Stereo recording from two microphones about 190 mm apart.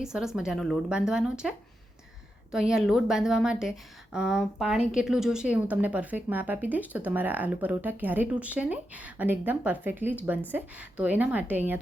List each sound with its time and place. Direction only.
0.0 s a woman's voice: 5° right (ahead or behind)